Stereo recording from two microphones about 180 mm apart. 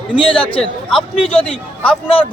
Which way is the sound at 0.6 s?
Centre (ahead or behind).